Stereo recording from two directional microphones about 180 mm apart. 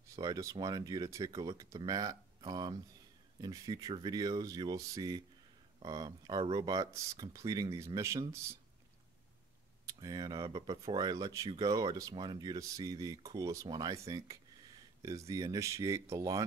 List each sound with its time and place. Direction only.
0.1 s speech: 20° right (ahead or behind)
9.9 s speech: 20° right (ahead or behind)